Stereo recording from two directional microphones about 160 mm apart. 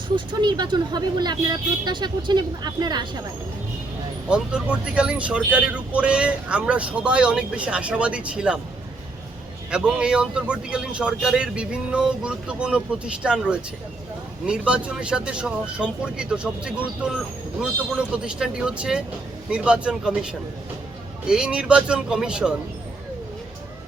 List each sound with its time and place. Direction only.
0.3 s speech: 25° right (ahead or behind)
4.3 s speech: 5° right (ahead or behind)
9.6 s a man's voice: 5° right (ahead or behind)